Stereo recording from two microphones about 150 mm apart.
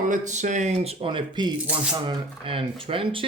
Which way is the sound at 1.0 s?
30° right (ahead or behind).